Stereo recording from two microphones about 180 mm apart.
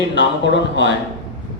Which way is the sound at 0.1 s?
80° left.